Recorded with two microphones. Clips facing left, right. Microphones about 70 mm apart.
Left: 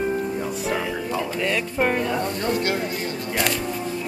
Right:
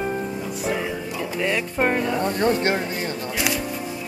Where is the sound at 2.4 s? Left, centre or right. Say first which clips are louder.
Right 6 dB; right.